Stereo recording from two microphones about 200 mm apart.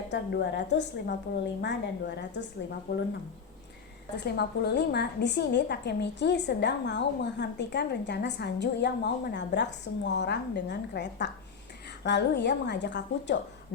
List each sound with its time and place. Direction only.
0.1 s a woman's voice: 60° left (ahead or behind)
4.2 s a woman's voice: 55° left (ahead or behind)